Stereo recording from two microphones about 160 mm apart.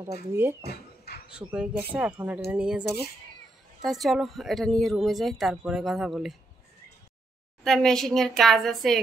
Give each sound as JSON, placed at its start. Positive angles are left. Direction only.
{"t": 0.0, "sound": "speech", "side_deg": -15}
{"t": 0.7, "sound": "bird", "side_deg": 90}
{"t": 1.5, "sound": "speech", "side_deg": -5}
{"t": 7.6, "sound": "speech", "side_deg": 5}